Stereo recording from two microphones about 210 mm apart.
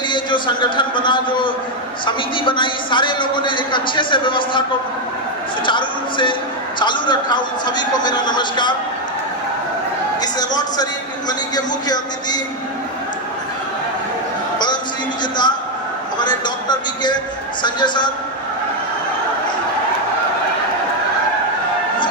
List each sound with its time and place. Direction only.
0.1 s speech: 20° left (ahead or behind)
5.6 s speech: 25° left (ahead or behind)
10.2 s a sound: 20° left (ahead or behind)
11.3 s speech: 20° left (ahead or behind)
15.2 s a man's voice: 20° left (ahead or behind)